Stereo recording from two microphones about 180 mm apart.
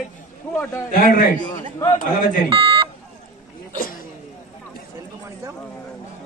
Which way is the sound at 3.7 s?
50° left (ahead or behind).